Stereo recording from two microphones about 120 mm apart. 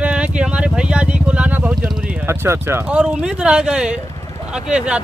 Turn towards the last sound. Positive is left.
turn(degrees=-10)  # may be behind; listen again after turning